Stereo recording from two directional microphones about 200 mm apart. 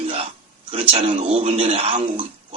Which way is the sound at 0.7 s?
25° right (ahead or behind).